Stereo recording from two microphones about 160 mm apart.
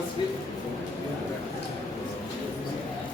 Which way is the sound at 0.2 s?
30° left (ahead or behind).